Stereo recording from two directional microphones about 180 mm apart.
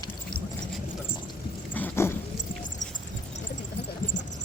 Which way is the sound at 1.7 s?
10° left (ahead or behind).